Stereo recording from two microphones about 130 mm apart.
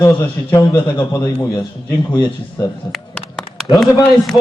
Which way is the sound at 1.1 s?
30° left (ahead or behind).